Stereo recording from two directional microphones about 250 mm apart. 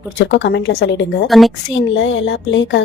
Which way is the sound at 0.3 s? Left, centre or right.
Left.